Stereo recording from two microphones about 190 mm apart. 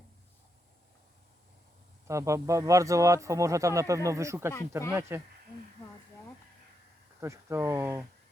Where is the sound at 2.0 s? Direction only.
15° right (ahead or behind).